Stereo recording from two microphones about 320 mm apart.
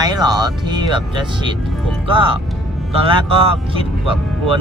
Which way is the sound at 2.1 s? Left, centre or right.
Centre.